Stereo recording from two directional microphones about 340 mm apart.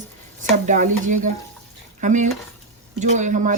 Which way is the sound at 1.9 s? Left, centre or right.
Right.